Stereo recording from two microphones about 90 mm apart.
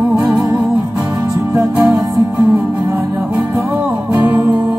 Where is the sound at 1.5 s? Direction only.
25° right (ahead or behind).